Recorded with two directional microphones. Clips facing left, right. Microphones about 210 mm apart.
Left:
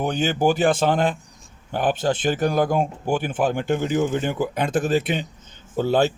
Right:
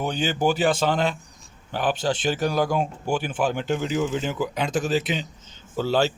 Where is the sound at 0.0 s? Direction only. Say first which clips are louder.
Left 3 dB; 50° left (ahead or behind).